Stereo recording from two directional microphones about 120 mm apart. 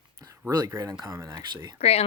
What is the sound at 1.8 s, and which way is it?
Speech, 60° left (ahead or behind).